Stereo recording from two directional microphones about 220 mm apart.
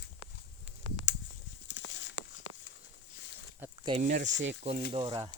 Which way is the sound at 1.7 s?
55° left (ahead or behind).